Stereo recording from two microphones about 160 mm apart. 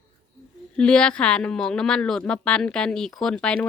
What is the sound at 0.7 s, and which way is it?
A woman's voice, 5° left (ahead or behind).